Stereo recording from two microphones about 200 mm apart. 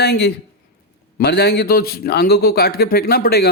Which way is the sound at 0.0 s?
55° left (ahead or behind).